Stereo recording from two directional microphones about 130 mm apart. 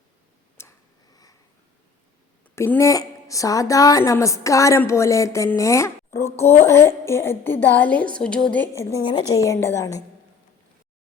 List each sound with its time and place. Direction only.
0.6 s a sound: 20° left (ahead or behind)
2.6 s a woman's voice: 20° left (ahead or behind)
8.7 s a woman's voice: 25° left (ahead or behind)